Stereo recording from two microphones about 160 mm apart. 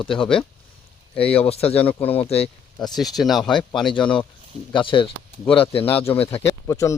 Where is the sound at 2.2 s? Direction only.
40° left (ahead or behind).